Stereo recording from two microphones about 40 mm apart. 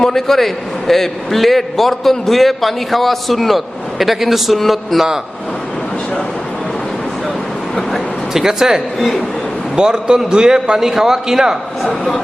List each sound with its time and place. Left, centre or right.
0.0 s a man's voice: centre
8.3 s a man's voice: centre
11.8 s a man's voice: centre